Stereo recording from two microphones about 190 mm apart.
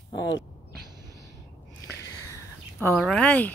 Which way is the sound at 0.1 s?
20° left (ahead or behind).